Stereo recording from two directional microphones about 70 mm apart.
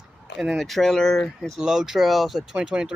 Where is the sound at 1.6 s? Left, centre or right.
Centre.